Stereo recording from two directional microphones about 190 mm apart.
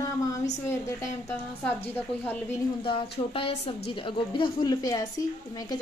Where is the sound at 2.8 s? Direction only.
30° left (ahead or behind).